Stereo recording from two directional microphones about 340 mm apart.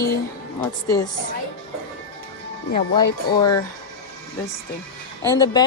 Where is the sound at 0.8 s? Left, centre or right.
Centre.